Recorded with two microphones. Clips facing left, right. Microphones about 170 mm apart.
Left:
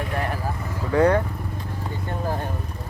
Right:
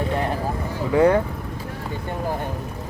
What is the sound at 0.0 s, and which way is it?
Vehicle, 25° right (ahead or behind).